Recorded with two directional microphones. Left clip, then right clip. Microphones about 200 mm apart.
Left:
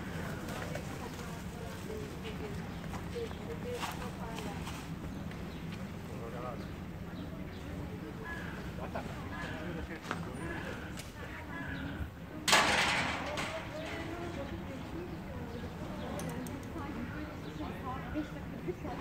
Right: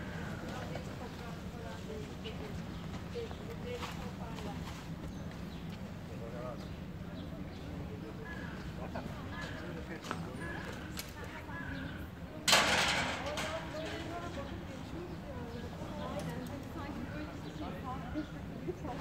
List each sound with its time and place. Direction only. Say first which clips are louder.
12.4 s vehicle: left 1 dB; 35° right (ahead or behind)